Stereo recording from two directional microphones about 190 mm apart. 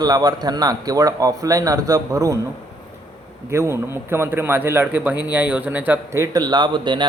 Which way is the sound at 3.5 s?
15° right (ahead or behind).